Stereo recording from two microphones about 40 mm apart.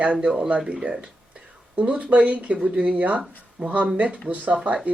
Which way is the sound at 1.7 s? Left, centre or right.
Right.